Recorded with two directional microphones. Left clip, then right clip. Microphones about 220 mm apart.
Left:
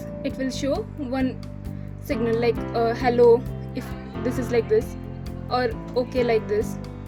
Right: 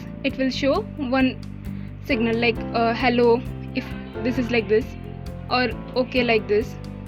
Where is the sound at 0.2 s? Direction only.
25° right (ahead or behind).